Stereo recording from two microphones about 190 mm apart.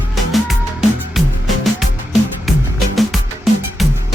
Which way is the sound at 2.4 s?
Centre (ahead or behind).